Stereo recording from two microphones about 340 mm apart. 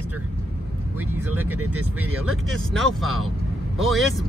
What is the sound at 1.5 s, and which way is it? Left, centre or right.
Speech, right.